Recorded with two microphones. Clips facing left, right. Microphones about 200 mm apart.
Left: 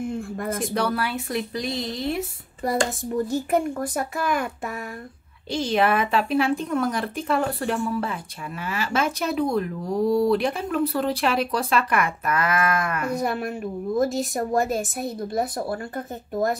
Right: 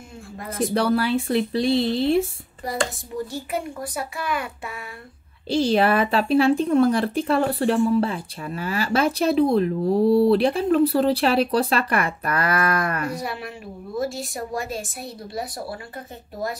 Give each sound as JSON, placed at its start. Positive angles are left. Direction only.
{"t": 0.0, "sound": "a sound", "side_deg": 55}
{"t": 0.7, "sound": "speech", "side_deg": -30}
{"t": 3.3, "sound": "a woman's voice", "side_deg": 45}
{"t": 5.5, "sound": "a woman's voice", "side_deg": -35}
{"t": 13.1, "sound": "a woman's voice", "side_deg": 50}